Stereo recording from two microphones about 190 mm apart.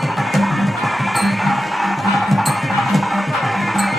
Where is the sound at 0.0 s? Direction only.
Centre (ahead or behind).